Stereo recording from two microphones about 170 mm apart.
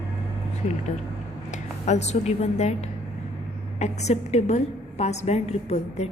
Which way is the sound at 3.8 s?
40° left (ahead or behind).